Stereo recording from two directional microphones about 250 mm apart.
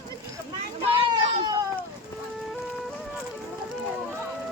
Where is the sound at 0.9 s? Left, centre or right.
Centre.